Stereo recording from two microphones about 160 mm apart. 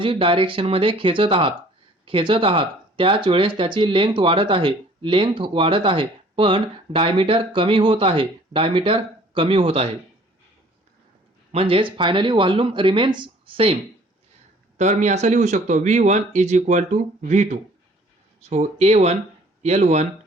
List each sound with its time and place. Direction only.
0.0 s speech: 35° right (ahead or behind)
11.5 s speech: 35° right (ahead or behind)
14.8 s speech: 45° right (ahead or behind)